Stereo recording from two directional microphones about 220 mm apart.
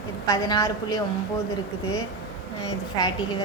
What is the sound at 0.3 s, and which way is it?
Speech, 15° left (ahead or behind).